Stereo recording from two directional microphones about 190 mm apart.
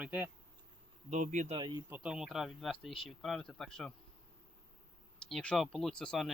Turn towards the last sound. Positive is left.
turn(degrees=5)  # may be behind; listen again after turning